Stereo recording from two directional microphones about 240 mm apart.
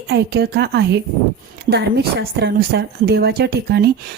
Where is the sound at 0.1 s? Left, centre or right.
Right.